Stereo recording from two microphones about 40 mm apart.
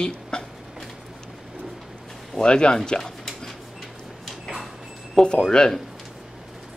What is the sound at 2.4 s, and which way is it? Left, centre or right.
Speech, left.